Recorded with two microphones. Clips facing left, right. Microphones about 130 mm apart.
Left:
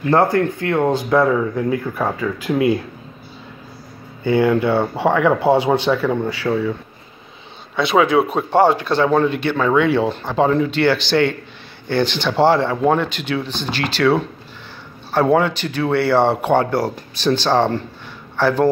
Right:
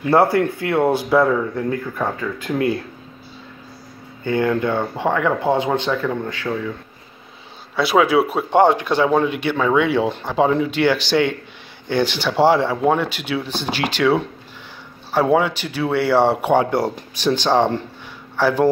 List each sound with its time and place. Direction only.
0.0 s speech: 10° right (ahead or behind)
1.2 s speech: 5° left (ahead or behind)
4.2 s speech: 10° left (ahead or behind)
7.7 s speech: 5° right (ahead or behind)
8.5 s speech: 20° right (ahead or behind)
16.7 s speech: 20° right (ahead or behind)